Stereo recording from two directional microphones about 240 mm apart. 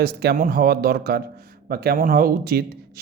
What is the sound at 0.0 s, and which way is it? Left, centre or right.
Speech, right.